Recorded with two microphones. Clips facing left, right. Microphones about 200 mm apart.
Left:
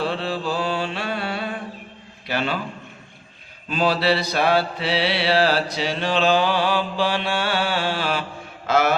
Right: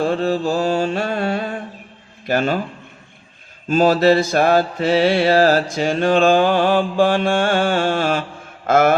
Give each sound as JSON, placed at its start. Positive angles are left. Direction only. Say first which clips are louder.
{"t": 0.0, "sound": "mantra", "louder": "right 7 dB", "side_deg": -45}
{"t": 3.7, "sound": "mantra", "louder": "right 7 dB", "side_deg": -45}
{"t": 8.6, "sound": "a man's voice", "louder": "right 5 dB", "side_deg": -50}